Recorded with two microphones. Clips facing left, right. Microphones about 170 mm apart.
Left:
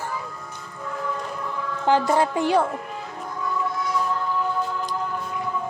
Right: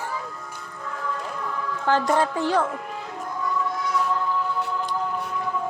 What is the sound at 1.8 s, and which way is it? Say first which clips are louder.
Speech: left 2 dB; 15° left (ahead or behind).